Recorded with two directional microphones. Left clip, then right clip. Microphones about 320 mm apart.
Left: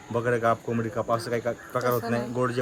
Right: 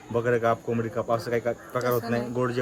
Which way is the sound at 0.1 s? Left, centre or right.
Centre.